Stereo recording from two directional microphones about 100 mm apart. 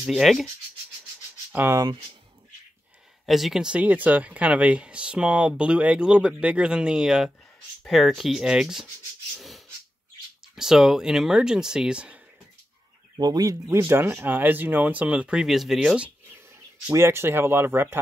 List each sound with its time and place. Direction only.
0.0 s speech: centre (ahead or behind)
1.5 s speech: 20° right (ahead or behind)
3.3 s speech: centre (ahead or behind)
9.3 s a sound: centre (ahead or behind)
10.5 s speech: 5° right (ahead or behind)
13.2 s speech: 40° right (ahead or behind); by 16.1 s 5° right (ahead or behind)
16.9 s speech: 25° right (ahead or behind)